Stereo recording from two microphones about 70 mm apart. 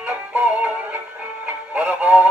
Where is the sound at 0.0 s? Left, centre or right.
Right.